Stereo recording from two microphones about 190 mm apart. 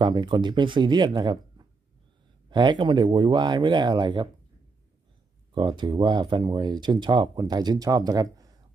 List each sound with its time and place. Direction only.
0.0 s speech: 25° right (ahead or behind)
5.5 s speech: 25° right (ahead or behind)